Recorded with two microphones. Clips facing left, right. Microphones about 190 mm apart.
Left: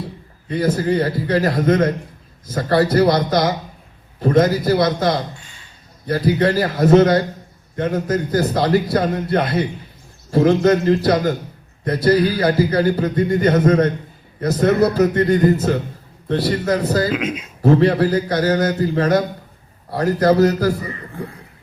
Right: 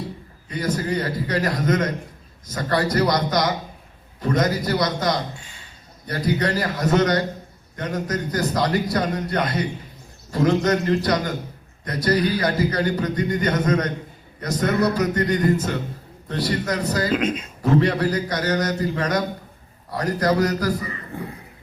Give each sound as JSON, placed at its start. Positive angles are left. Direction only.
{"t": 0.9, "sound": "a man's voice", "side_deg": 30}
{"t": 17.1, "sound": "speech", "side_deg": 5}
{"t": 17.6, "sound": "a man's voice", "side_deg": 30}